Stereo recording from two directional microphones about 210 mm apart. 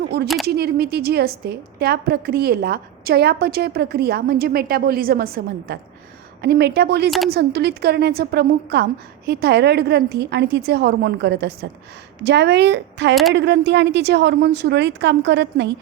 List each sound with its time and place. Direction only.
0.4 s a woman's voice: 50° right (ahead or behind)